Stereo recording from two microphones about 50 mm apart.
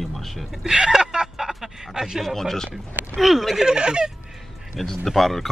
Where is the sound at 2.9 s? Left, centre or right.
Right.